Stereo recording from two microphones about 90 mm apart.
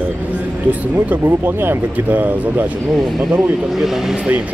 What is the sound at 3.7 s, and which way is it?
Speech, 5° right (ahead or behind).